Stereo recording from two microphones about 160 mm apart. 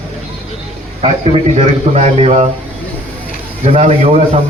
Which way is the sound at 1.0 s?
40° right (ahead or behind).